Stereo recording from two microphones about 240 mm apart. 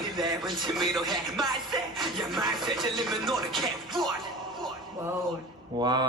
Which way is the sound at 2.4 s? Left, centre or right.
Centre.